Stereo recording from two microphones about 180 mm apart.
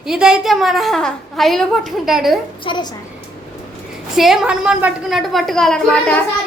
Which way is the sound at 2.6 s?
25° left (ahead or behind).